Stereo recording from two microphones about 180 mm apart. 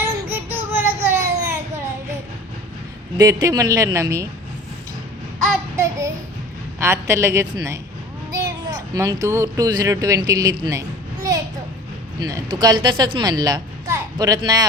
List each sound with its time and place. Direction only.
0.3 s a sound: 10° right (ahead or behind)
3.2 s speech: 20° right (ahead or behind)
5.7 s child singing: 15° right (ahead or behind)
6.7 s a woman's voice: 15° right (ahead or behind)